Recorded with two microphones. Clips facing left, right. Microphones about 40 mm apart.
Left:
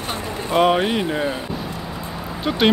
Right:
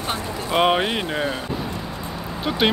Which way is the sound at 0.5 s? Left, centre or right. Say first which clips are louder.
Left 2 dB; centre.